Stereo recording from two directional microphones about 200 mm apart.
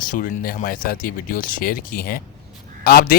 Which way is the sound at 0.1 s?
45° left (ahead or behind).